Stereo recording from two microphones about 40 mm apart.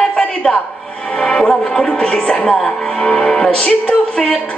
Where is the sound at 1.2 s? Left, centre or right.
Centre.